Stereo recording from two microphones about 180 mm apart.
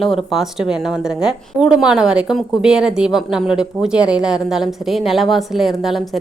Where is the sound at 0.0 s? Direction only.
Centre (ahead or behind).